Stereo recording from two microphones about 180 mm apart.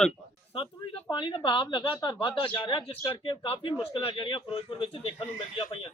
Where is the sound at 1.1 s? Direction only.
25° left (ahead or behind).